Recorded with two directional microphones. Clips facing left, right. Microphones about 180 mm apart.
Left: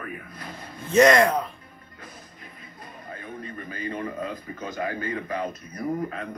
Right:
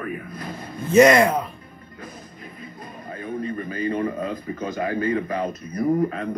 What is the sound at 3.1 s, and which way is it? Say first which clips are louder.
A man's voice: right 9 dB; 30° right (ahead or behind).